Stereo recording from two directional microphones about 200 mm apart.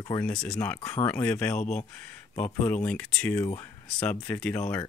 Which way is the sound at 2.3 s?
10° left (ahead or behind).